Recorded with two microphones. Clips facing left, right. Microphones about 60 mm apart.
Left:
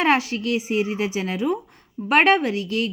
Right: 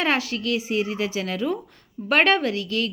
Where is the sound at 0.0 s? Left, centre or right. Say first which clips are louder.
Left 4 dB; left.